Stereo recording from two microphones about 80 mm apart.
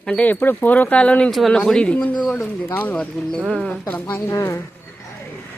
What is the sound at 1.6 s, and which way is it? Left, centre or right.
Speech, centre.